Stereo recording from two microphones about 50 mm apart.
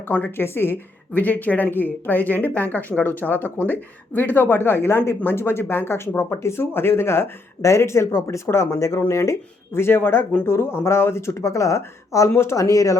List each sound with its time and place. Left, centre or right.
0.3 s speech: left
1.1 s speech: left
8.4 s speech: left
9.0 s speech: left
9.7 s speech: left
12.4 s speech: left